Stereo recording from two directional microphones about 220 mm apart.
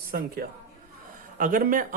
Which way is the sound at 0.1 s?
40° right (ahead or behind).